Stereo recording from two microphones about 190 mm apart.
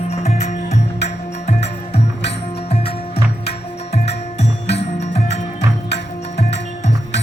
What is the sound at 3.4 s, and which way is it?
Music, 35° left (ahead or behind).